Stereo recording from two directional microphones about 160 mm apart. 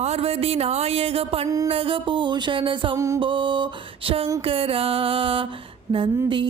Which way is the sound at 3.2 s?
30° right (ahead or behind).